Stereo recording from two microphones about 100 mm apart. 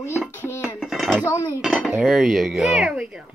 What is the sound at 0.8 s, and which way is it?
Speech, centre (ahead or behind).